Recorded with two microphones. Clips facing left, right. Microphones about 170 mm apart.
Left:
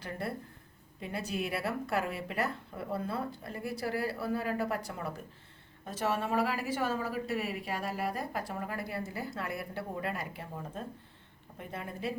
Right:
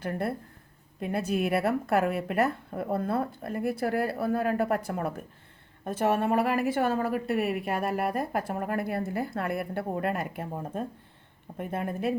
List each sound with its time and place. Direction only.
0.0 s a woman's voice: 55° right (ahead or behind)